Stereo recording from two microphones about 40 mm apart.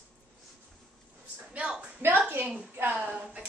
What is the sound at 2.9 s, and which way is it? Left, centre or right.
Speech, right.